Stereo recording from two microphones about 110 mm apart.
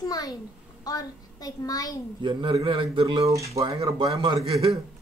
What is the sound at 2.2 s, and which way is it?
A man's voice, 45° right (ahead or behind).